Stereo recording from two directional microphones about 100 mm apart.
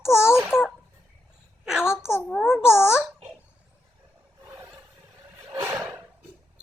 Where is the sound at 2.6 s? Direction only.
25° left (ahead or behind).